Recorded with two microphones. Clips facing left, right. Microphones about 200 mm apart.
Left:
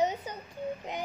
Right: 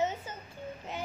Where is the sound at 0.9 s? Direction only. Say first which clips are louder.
Left 2 dB; 15° left (ahead or behind).